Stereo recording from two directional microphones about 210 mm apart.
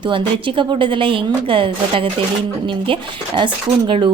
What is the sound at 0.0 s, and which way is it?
A woman's voice, 25° right (ahead or behind).